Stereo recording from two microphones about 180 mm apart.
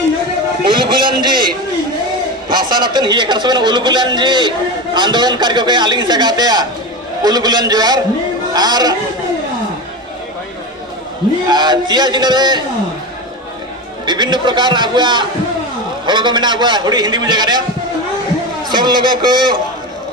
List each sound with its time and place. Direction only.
0.7 s a man's voice: 25° right (ahead or behind)
2.5 s a man's voice: 25° right (ahead or behind)
11.4 s a man's voice: 25° right (ahead or behind)
14.0 s a man's voice: 25° right (ahead or behind)
18.7 s a man's voice: 25° right (ahead or behind)